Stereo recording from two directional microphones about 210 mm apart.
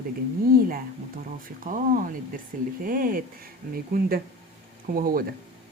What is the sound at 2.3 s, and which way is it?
A woman's voice, 40° right (ahead or behind).